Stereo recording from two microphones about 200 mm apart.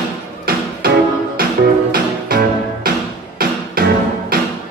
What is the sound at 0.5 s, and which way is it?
Music, 45° right (ahead or behind).